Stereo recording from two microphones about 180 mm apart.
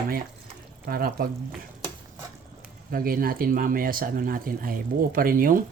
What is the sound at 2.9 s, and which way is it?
Speech, 55° right (ahead or behind).